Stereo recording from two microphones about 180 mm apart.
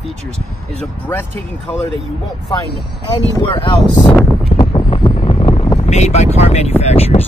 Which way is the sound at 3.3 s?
30° left (ahead or behind).